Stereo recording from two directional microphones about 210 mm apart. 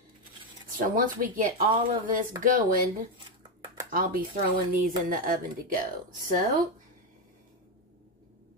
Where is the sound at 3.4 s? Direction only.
20° right (ahead or behind).